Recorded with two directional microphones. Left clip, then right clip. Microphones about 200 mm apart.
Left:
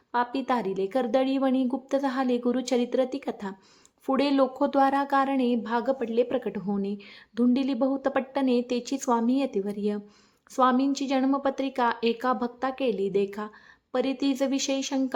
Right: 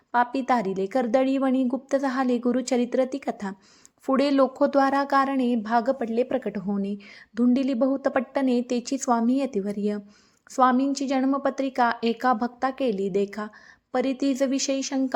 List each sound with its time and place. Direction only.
0.1 s a woman's voice: 20° right (ahead or behind)